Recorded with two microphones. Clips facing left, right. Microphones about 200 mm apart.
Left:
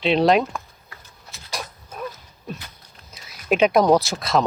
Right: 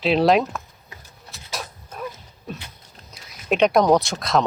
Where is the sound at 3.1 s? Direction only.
5° left (ahead or behind).